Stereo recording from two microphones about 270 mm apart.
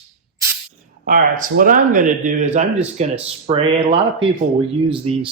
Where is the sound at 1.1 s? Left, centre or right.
Right.